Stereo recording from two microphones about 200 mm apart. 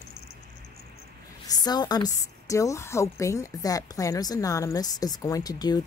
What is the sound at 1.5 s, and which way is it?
A woman's voice, 20° left (ahead or behind).